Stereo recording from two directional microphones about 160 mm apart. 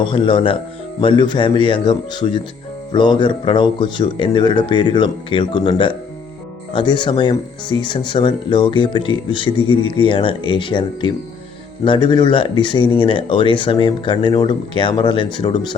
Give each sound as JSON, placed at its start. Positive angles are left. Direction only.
{"t": 0.0, "sound": "speech", "side_deg": 30}